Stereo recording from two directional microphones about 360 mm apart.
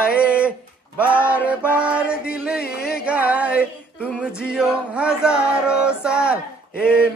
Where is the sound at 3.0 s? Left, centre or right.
Centre.